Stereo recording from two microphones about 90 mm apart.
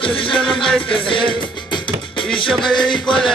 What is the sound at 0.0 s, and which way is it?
Music, 75° left (ahead or behind).